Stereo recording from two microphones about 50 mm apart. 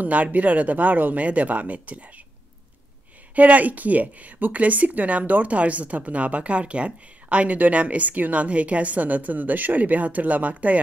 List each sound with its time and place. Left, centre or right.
0.0 s a woman's voice: right
3.3 s a woman's voice: right